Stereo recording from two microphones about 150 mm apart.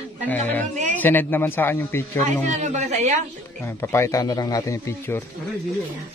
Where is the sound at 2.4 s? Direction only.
50° right (ahead or behind).